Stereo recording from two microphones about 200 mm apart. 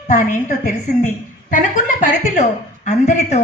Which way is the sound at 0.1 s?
40° left (ahead or behind).